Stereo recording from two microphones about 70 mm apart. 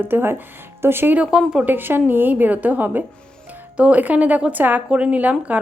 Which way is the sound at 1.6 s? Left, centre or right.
Right.